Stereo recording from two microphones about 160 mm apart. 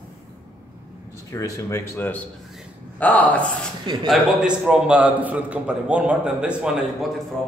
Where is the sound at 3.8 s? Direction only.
30° right (ahead or behind).